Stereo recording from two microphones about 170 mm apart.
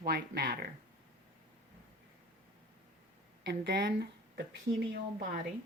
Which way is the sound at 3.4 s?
65° right (ahead or behind).